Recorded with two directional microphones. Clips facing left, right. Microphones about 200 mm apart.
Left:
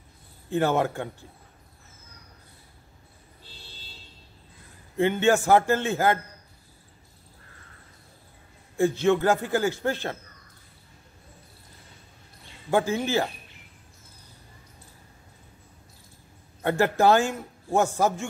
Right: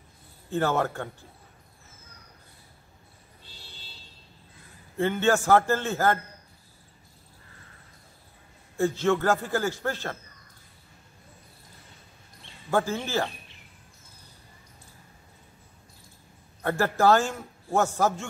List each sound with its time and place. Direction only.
0.5 s a man's voice: 15° left (ahead or behind)
4.9 s a man's voice: 15° left (ahead or behind)
8.7 s a man's voice: 15° left (ahead or behind)
12.7 s a man's voice: 15° left (ahead or behind)
16.6 s a man's voice: 20° left (ahead or behind)